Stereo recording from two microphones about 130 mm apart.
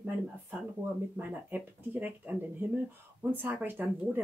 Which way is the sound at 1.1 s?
15° right (ahead or behind).